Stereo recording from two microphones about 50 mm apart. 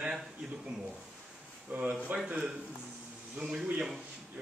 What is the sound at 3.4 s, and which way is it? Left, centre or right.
Speech, centre.